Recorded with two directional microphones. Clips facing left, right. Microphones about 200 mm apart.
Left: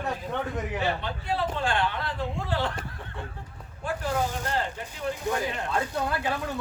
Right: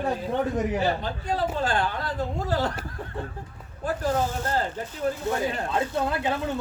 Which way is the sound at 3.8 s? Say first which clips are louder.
Right 3 dB; 40° right (ahead or behind).